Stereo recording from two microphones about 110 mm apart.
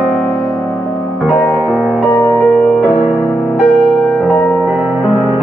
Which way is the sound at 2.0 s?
30° left (ahead or behind).